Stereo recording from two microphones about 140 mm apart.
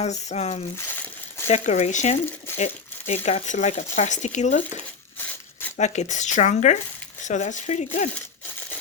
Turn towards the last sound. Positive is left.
turn(degrees=55)  # may be behind; listen again after turning